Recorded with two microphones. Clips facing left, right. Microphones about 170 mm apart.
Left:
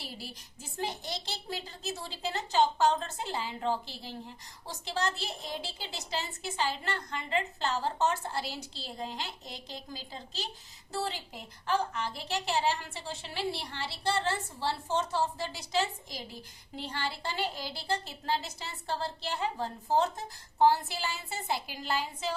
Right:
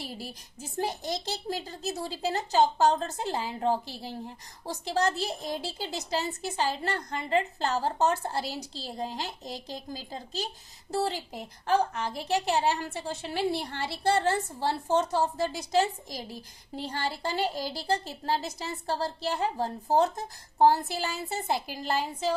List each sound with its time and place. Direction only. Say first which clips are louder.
0.0 s a woman's voice: right 5 dB; 45° right (ahead or behind)